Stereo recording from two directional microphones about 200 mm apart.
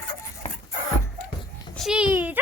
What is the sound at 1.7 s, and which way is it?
Speech, centre (ahead or behind).